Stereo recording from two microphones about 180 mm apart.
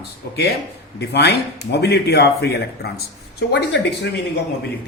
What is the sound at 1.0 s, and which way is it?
A man's voice, 70° left (ahead or behind).